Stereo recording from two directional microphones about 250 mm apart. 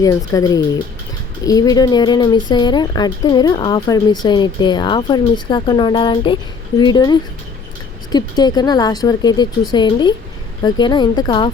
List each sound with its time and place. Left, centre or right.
0.0 s speech: centre